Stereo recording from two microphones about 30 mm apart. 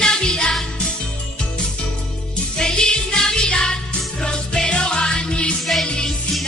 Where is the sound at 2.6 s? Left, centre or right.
Left.